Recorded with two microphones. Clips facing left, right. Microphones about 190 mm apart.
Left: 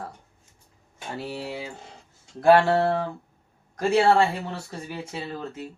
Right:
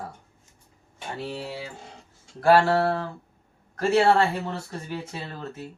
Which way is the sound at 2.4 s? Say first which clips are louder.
Left 1 dB; 20° left (ahead or behind).